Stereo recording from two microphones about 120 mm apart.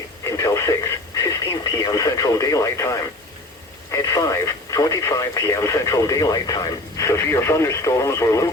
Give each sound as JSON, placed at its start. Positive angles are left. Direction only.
{"t": 0.3, "sound": "radio", "side_deg": 25}
{"t": 1.8, "sound": "speech", "side_deg": 30}